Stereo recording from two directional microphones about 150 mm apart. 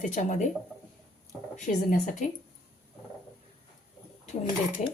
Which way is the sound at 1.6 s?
60° left (ahead or behind).